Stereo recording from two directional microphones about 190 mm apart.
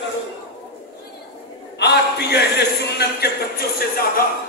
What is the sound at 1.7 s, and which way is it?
A man's voice, 60° left (ahead or behind).